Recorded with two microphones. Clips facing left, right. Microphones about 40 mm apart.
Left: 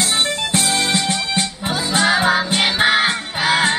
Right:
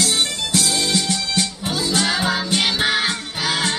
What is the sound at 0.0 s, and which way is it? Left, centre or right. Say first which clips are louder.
Music: left 2 dB; left.